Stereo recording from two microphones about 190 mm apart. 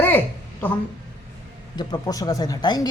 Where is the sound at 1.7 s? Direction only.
20° left (ahead or behind).